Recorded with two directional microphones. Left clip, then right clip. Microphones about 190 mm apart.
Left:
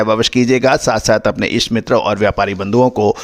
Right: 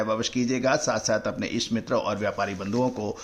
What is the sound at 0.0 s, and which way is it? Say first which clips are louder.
Speech: left 13 dB; 60° left (ahead or behind).